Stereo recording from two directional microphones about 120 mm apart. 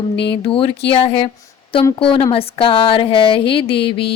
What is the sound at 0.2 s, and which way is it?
Speech, 50° left (ahead or behind).